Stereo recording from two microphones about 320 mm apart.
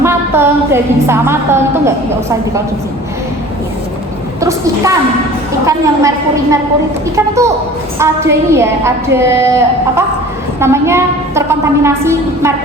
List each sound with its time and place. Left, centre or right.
0.0 s a woman's voice: centre
4.4 s a woman's voice: centre
7.9 s a woman's voice: centre